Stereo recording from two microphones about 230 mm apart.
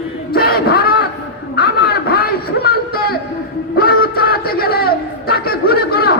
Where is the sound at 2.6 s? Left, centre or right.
Left.